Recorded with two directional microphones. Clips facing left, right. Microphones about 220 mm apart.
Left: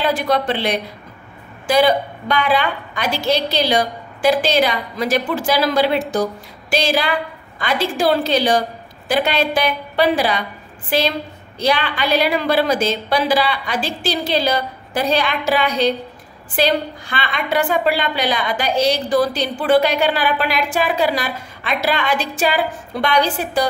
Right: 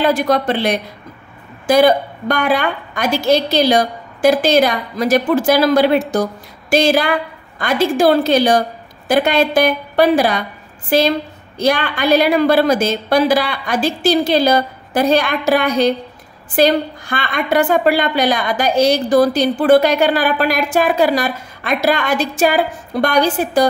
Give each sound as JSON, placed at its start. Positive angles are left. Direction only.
{"t": 0.0, "sound": "a woman's voice", "side_deg": -45}